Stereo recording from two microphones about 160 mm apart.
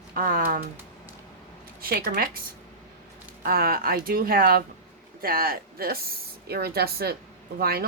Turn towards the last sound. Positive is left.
turn(degrees=-75)  # may be behind; listen again after turning